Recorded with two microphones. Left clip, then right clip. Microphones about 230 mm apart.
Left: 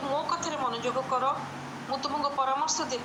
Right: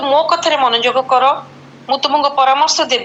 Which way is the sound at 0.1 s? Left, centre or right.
Right.